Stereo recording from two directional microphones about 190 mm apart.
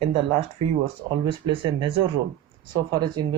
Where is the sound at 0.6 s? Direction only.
30° right (ahead or behind).